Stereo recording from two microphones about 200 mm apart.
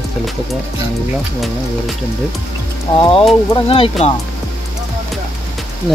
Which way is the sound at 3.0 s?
25° left (ahead or behind).